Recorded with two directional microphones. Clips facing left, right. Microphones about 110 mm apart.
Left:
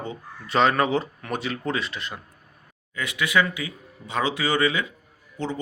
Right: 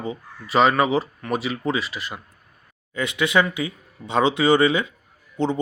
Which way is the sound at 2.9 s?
25° right (ahead or behind).